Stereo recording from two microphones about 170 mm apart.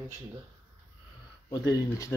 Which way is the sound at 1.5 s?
20° left (ahead or behind).